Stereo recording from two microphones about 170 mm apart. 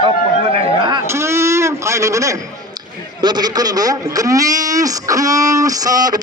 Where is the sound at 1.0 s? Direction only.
15° right (ahead or behind).